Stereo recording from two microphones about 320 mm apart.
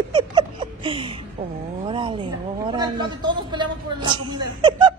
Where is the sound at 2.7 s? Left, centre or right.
Centre.